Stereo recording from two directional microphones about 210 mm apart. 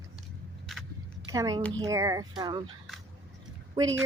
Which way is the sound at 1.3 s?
15° right (ahead or behind).